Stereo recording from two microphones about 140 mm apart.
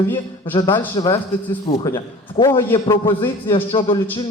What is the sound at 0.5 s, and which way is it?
Speech, 35° left (ahead or behind).